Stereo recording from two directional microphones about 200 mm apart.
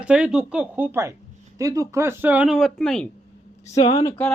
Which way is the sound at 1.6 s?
15° right (ahead or behind).